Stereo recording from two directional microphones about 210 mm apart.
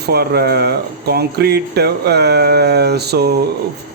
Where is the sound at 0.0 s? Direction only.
50° right (ahead or behind).